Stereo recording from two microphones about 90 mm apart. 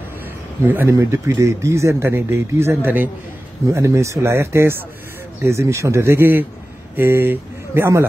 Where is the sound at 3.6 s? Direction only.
35° right (ahead or behind).